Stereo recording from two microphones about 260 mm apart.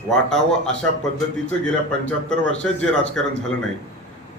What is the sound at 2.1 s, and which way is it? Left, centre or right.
A man's voice, centre.